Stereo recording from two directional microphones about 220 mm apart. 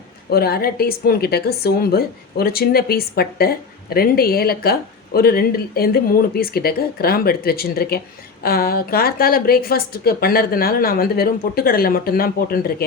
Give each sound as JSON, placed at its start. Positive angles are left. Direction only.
{"t": 0.3, "sound": "a woman's voice", "side_deg": 45}